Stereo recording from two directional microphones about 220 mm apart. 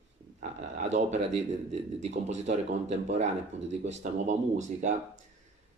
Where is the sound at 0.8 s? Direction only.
30° right (ahead or behind).